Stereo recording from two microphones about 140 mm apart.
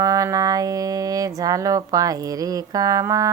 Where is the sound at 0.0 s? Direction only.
25° right (ahead or behind).